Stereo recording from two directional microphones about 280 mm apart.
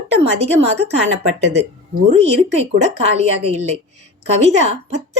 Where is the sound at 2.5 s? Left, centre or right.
Right.